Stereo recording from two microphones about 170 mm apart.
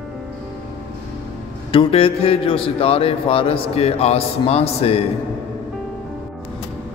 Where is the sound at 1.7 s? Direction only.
35° left (ahead or behind).